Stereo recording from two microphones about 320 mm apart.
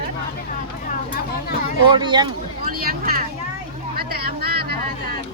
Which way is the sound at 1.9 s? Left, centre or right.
Centre.